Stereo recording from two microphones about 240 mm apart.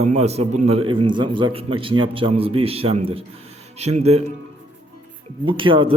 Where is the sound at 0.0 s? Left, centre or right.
Right.